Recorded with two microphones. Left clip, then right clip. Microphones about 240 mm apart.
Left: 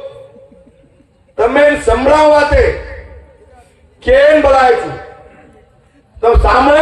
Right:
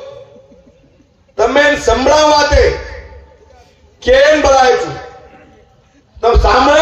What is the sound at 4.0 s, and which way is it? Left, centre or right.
Speech, right.